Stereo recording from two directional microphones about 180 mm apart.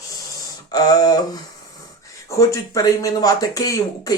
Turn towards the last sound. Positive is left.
turn(degrees=20)  # may be behind; listen again after turning